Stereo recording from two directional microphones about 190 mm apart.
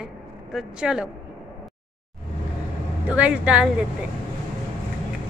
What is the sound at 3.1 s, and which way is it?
Speech, 5° right (ahead or behind).